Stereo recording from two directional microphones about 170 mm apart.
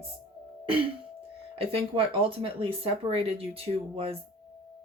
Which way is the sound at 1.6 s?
35° right (ahead or behind).